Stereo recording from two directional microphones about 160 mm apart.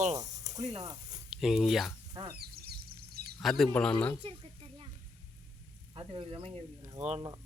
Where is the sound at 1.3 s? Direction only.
Centre (ahead or behind).